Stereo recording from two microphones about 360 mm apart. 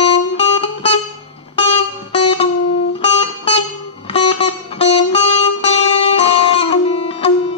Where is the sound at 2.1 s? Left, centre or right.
Centre.